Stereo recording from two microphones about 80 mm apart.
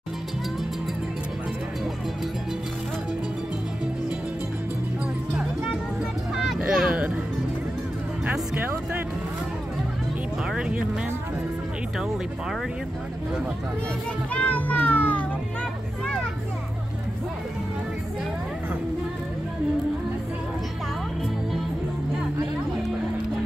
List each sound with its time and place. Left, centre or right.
6.3 s vehicle: centre
8.3 s music: right
14.3 s music: centre